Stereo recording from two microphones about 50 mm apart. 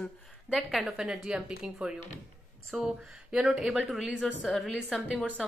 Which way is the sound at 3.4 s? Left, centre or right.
Centre.